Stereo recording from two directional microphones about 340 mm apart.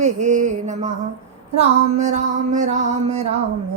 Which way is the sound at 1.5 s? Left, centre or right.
Right.